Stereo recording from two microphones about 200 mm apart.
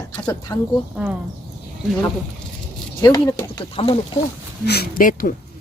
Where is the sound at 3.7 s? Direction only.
30° left (ahead or behind).